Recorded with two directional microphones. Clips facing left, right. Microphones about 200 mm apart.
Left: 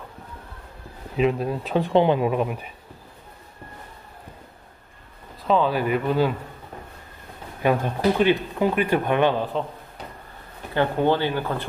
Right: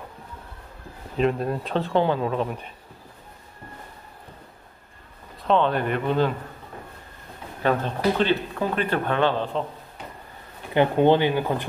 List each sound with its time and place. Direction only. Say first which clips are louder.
1.1 s speech: left 1 dB; 5° left (ahead or behind)
1.8 s speech: left 4 dB; 20° left (ahead or behind)
5.4 s speech: even; 5° left (ahead or behind)
7.6 s speech: left 2 dB; 10° left (ahead or behind)
10.7 s speech: right 3 dB; 15° right (ahead or behind)